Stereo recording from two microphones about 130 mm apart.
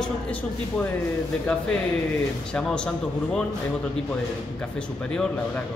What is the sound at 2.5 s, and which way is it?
Speech, 5° left (ahead or behind).